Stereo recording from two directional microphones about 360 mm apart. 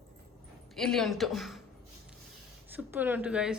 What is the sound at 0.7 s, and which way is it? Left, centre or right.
Speech, centre.